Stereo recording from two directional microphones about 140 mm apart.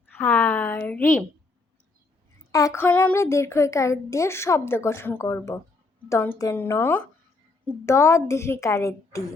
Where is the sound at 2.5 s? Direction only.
20° left (ahead or behind).